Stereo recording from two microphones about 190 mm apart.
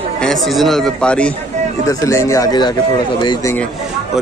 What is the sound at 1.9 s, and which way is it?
Speech, 15° left (ahead or behind).